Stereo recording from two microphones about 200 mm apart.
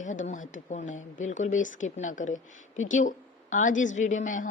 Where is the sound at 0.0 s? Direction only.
40° left (ahead or behind).